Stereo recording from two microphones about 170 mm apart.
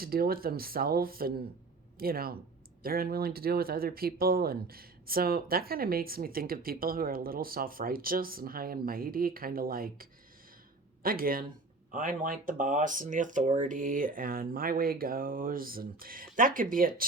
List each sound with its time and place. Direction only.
0.0 s speech: 60° right (ahead or behind)